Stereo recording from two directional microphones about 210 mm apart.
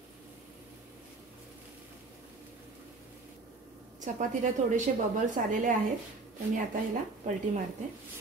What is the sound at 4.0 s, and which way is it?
A woman's voice, 35° right (ahead or behind).